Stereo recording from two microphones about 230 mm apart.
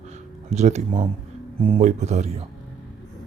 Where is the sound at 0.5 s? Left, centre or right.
Right.